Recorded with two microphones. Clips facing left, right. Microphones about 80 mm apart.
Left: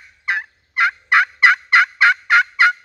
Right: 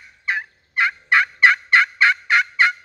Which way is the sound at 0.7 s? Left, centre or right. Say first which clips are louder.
Left 3 dB; left.